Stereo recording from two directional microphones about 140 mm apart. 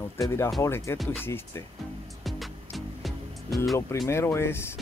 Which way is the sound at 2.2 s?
Centre (ahead or behind).